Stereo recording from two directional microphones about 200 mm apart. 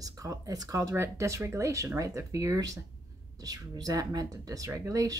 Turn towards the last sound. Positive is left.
turn(degrees=-15)  # may be behind; listen again after turning